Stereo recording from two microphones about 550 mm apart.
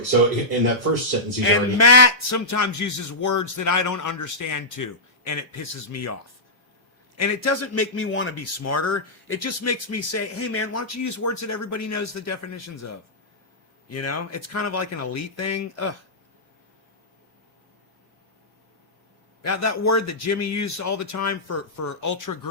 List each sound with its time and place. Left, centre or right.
1.5 s a man's voice: left
7.2 s a man's voice: left
19.4 s a man's voice: left